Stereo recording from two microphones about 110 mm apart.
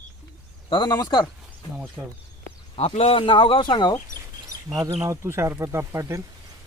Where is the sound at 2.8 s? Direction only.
65° left (ahead or behind); by 4.0 s 45° left (ahead or behind).